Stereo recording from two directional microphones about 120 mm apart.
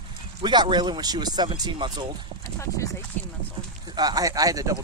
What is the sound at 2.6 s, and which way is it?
Speech, 25° left (ahead or behind).